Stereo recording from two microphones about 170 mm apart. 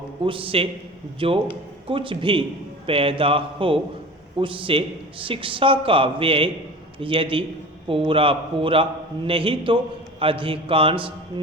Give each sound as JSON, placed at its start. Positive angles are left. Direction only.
{"t": 0.3, "sound": "a man's voice", "side_deg": -30}